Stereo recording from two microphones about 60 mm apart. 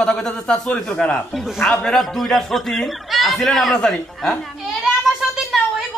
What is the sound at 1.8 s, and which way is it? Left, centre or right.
A man's voice, centre.